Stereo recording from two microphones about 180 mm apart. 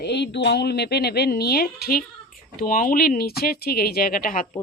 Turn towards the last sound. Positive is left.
turn(degrees=50)  # may be behind; listen again after turning